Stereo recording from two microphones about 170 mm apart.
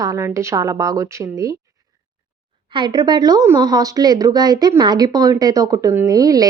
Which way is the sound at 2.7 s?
25° right (ahead or behind).